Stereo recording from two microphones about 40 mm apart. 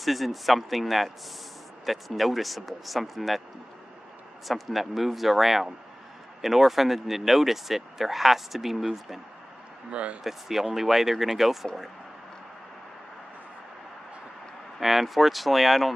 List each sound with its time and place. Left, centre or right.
0.0 s speech: centre
4.5 s speech: centre
9.8 s speech: right
10.2 s speech: centre
14.8 s speech: centre